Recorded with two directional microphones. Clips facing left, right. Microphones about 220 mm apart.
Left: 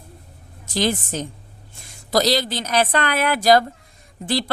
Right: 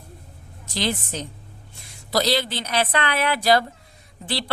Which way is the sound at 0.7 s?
45° left (ahead or behind).